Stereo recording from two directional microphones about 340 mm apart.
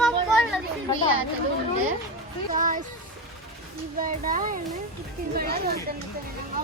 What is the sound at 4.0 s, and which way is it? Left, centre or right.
A woman's voice, right.